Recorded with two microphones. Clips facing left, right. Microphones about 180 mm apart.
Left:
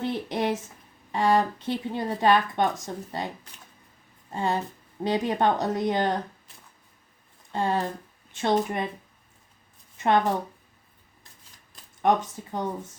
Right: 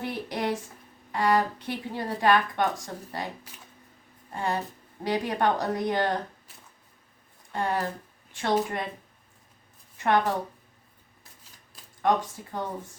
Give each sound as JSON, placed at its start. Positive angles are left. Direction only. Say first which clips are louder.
{"t": 0.0, "sound": "a sound", "louder": "left 3 dB", "side_deg": 25}
{"t": 1.1, "sound": "a woman's voice", "louder": "left 2 dB", "side_deg": 25}
{"t": 4.3, "sound": "a woman's voice", "louder": "left 2 dB", "side_deg": 20}
{"t": 7.5, "sound": "a woman's voice", "louder": "left 2 dB", "side_deg": 25}
{"t": 10.0, "sound": "a woman's voice", "louder": "left 2 dB", "side_deg": 20}
{"t": 12.0, "sound": "a woman's voice", "louder": "left 2 dB", "side_deg": 20}